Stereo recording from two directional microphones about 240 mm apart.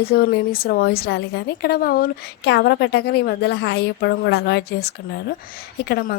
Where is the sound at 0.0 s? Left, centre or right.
Left.